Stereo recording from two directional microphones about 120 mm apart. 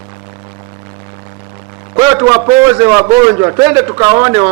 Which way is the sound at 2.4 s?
15° right (ahead or behind).